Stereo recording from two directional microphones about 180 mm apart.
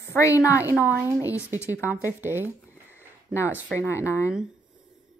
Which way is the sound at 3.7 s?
15° left (ahead or behind).